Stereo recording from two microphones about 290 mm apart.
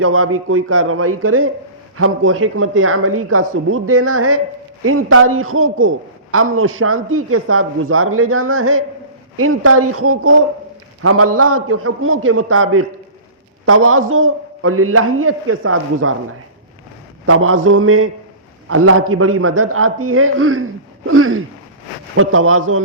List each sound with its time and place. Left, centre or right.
0.0 s a man's voice: right
17.2 s a man's voice: right